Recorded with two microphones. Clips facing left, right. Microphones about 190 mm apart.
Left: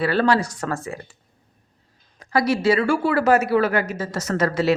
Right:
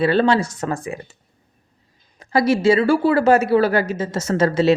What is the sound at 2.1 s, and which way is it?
A woman's voice, 25° right (ahead or behind).